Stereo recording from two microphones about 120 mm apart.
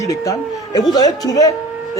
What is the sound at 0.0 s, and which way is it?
Speech, 30° left (ahead or behind).